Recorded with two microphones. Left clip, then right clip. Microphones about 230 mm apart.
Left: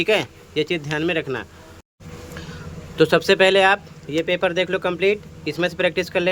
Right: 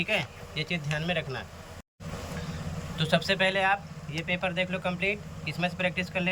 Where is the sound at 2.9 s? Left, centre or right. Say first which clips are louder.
Left 11 dB; centre.